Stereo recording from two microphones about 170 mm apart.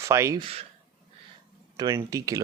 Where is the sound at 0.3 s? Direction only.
35° right (ahead or behind).